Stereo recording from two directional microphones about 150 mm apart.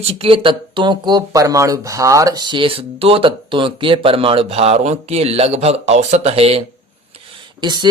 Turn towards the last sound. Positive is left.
turn(degrees=-30)  # may be behind; listen again after turning